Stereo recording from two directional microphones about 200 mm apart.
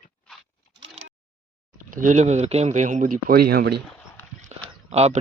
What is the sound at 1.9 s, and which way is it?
Speech, 40° right (ahead or behind).